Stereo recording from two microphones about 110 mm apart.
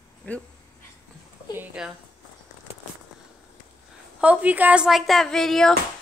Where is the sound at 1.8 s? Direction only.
5° right (ahead or behind).